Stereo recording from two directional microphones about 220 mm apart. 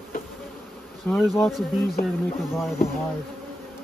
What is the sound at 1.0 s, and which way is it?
Bee, 5° left (ahead or behind).